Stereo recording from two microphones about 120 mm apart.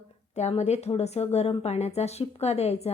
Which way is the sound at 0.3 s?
70° left (ahead or behind).